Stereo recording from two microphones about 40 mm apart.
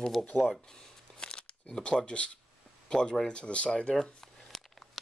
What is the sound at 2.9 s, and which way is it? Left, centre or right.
Speech, centre.